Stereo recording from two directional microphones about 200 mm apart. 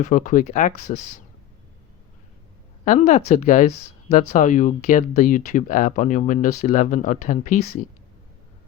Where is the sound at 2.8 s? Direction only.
35° left (ahead or behind).